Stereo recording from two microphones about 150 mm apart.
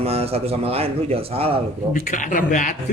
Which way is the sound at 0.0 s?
45° right (ahead or behind).